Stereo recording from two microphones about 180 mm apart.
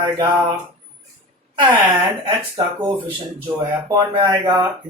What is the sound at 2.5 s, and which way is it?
Speech, 30° right (ahead or behind).